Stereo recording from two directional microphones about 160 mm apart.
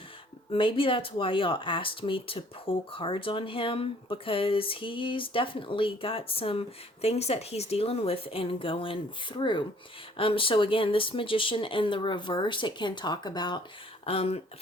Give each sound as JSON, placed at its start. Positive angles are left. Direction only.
{"t": 0.5, "sound": "speech", "side_deg": 35}
{"t": 14.0, "sound": "speech", "side_deg": 35}